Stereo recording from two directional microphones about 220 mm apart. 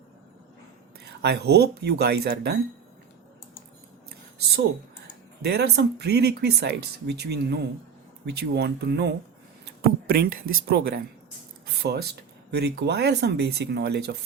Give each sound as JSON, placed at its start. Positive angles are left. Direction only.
{"t": 0.9, "sound": "speech", "side_deg": -50}
{"t": 5.5, "sound": "speech", "side_deg": -50}
{"t": 9.6, "sound": "a sound", "side_deg": -45}
{"t": 10.5, "sound": "speech", "side_deg": -45}